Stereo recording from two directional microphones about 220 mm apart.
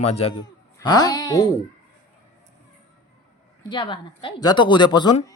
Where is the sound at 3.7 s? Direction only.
20° left (ahead or behind).